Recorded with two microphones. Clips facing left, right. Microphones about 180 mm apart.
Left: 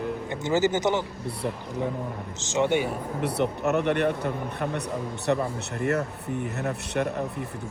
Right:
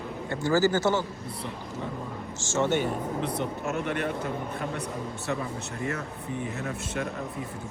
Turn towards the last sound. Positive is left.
turn(degrees=65)  # may be behind; listen again after turning